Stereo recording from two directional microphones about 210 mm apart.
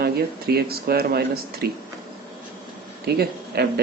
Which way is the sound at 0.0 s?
50° right (ahead or behind).